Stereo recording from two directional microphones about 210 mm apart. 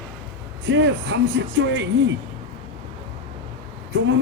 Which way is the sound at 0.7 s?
60° right (ahead or behind).